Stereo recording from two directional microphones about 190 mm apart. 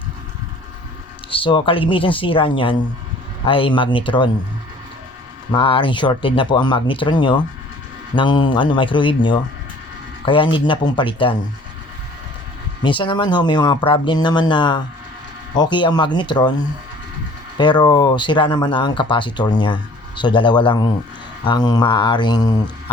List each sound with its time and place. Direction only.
1.3 s speech: 25° left (ahead or behind)
5.5 s speech: 25° left (ahead or behind)
12.8 s speech: 25° left (ahead or behind)
17.6 s speech: 25° left (ahead or behind)